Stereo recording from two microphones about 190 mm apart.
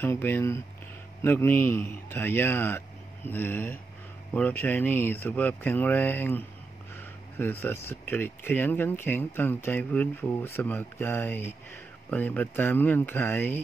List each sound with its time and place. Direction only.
0.0 s speech: 10° left (ahead or behind)